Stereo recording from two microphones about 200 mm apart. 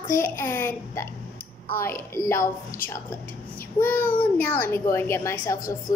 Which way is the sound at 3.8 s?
10° left (ahead or behind).